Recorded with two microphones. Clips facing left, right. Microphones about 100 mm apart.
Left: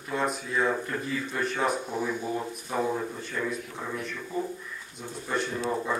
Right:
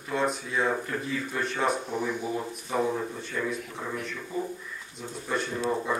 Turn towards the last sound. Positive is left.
turn(degrees=0)  # may be behind; listen again after turning